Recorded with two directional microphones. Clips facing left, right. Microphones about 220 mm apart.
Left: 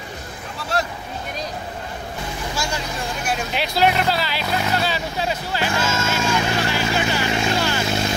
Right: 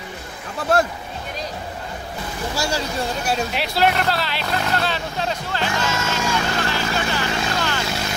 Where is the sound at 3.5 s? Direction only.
Centre (ahead or behind); by 7.8 s 15° left (ahead or behind).